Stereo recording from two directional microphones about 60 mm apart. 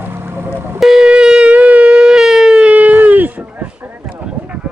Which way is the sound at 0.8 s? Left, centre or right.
Centre.